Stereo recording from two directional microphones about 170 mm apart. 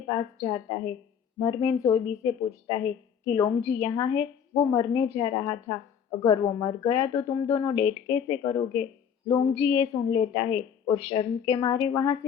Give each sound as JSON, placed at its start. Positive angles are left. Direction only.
{"t": 0.1, "sound": "a woman's voice", "side_deg": 25}